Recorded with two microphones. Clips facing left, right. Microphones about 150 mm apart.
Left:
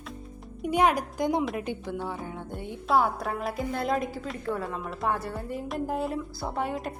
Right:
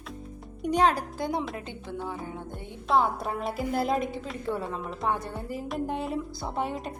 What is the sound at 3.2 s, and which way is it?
A woman's voice, centre (ahead or behind).